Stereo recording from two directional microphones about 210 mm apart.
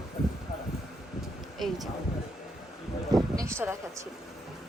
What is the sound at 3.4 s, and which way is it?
Speech, 10° right (ahead or behind).